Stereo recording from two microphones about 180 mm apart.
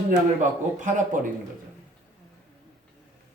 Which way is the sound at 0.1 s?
45° right (ahead or behind).